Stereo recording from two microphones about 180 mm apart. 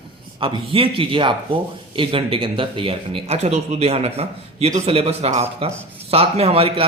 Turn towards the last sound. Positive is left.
turn(degrees=-35)  # may be behind; listen again after turning